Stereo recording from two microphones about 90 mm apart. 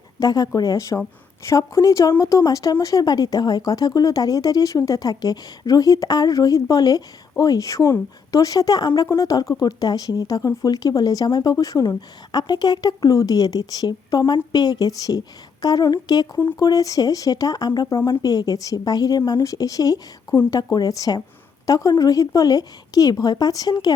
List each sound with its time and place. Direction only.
0.2 s speech: 45° left (ahead or behind)